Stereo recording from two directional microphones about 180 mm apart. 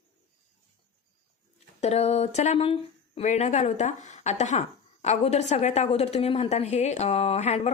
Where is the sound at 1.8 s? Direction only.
35° left (ahead or behind).